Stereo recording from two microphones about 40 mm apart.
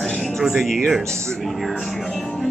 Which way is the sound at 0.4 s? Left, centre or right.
Centre.